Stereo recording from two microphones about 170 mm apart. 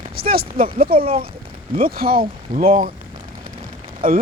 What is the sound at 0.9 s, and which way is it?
Speech, 35° right (ahead or behind).